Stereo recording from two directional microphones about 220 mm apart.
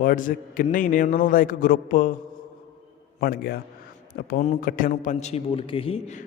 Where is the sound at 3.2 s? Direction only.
45° left (ahead or behind).